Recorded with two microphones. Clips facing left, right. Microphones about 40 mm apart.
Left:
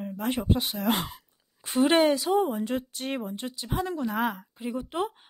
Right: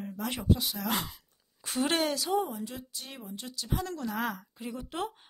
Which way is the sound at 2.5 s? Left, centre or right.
Left.